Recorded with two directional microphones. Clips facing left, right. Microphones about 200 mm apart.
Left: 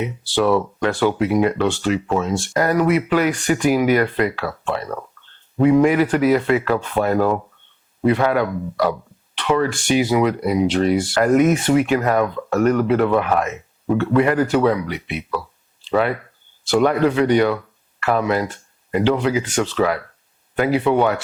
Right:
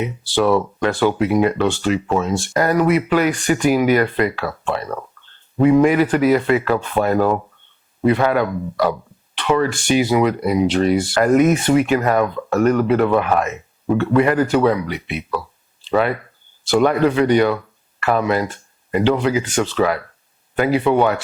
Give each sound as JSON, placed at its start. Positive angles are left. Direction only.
{"t": 0.0, "sound": "speech", "side_deg": -10}